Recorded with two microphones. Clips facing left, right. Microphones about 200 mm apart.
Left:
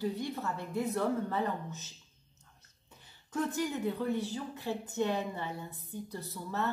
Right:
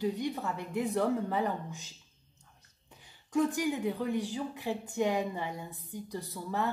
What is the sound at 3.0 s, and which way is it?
A woman's voice, 15° right (ahead or behind).